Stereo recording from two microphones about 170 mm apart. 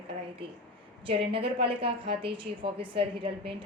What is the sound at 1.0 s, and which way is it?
A woman's voice, 30° right (ahead or behind).